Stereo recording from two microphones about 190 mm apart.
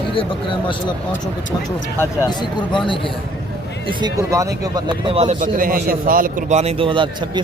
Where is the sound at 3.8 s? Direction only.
20° right (ahead or behind).